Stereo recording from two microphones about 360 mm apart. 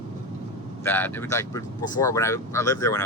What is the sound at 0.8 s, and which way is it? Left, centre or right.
Speech, centre.